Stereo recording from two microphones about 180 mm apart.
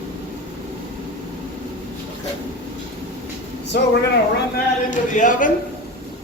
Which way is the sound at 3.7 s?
60° left (ahead or behind).